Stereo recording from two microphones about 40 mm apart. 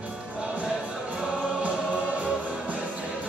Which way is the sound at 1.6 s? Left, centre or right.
Right.